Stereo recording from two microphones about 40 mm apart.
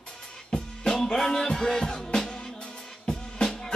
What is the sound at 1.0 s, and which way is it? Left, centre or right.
Music, centre.